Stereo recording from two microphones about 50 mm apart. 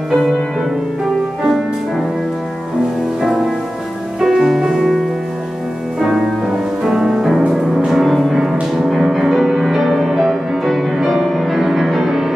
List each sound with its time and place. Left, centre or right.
0.1 s music: centre
4.2 s music: centre